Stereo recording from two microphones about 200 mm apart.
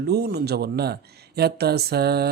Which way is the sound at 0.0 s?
55° right (ahead or behind).